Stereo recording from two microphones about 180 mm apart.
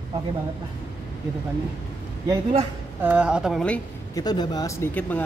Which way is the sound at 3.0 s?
5° right (ahead or behind).